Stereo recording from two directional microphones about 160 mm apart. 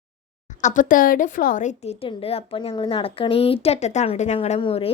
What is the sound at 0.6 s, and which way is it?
A woman's voice, 55° left (ahead or behind).